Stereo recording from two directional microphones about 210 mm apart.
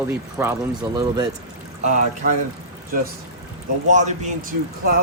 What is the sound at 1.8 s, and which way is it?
Speech, 35° right (ahead or behind).